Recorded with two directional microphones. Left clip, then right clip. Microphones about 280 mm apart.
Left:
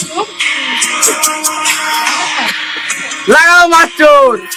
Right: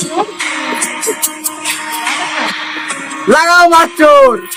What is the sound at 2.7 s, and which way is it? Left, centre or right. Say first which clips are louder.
Speech: left 2 dB; centre.